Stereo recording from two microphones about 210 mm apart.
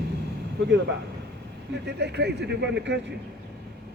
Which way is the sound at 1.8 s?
50° right (ahead or behind).